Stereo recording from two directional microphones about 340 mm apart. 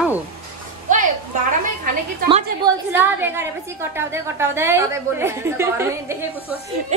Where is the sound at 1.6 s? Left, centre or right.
Right.